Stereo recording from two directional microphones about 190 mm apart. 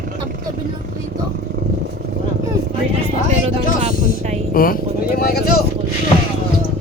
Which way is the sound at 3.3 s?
35° right (ahead or behind).